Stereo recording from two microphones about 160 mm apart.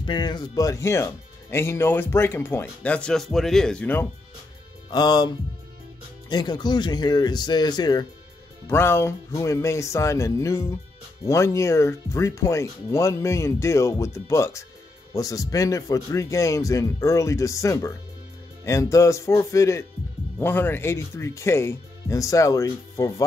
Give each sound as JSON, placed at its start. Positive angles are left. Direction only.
{"t": 0.0, "sound": "speech", "side_deg": 30}
{"t": 4.8, "sound": "speech", "side_deg": 25}
{"t": 8.6, "sound": "speech", "side_deg": 15}